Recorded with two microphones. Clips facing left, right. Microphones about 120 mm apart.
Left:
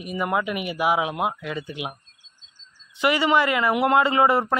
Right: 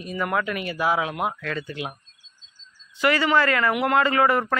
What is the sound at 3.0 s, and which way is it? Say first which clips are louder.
Speech: even; 20° left (ahead or behind).